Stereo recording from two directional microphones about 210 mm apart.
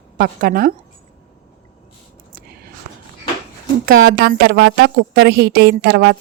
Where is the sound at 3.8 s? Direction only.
50° right (ahead or behind).